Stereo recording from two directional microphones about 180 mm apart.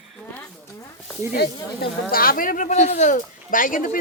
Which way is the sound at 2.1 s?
55° left (ahead or behind).